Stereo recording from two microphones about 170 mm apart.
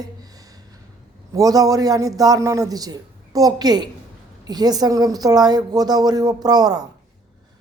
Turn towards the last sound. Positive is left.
turn(degrees=-25)  # may be behind; listen again after turning